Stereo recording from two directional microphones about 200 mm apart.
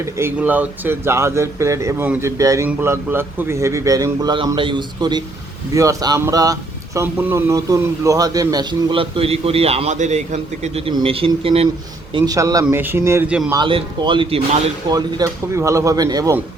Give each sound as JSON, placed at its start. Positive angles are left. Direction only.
{"t": 0.0, "sound": "speech", "side_deg": -10}
{"t": 12.1, "sound": "speech", "side_deg": -20}
{"t": 13.6, "sound": "speech", "side_deg": -25}